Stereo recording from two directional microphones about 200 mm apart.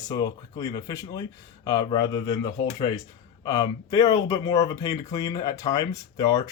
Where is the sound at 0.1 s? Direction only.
20° left (ahead or behind).